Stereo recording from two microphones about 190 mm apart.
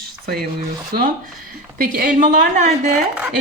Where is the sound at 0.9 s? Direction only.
55° right (ahead or behind).